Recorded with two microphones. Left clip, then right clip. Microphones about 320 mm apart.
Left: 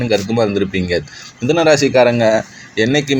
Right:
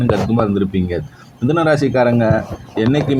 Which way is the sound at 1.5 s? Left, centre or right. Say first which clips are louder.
Left 3 dB; right.